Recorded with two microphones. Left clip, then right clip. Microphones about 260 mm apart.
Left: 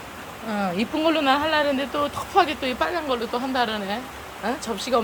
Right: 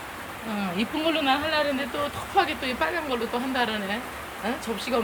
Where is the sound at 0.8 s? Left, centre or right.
Centre.